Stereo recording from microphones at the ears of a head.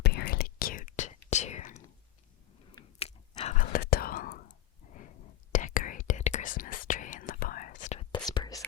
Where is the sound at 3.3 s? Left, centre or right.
Left.